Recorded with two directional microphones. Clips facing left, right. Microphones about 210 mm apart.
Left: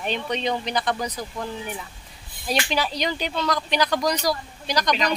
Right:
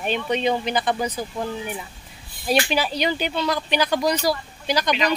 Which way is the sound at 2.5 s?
5° right (ahead or behind).